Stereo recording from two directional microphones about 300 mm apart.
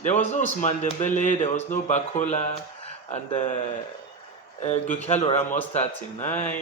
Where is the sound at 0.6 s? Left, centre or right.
Left.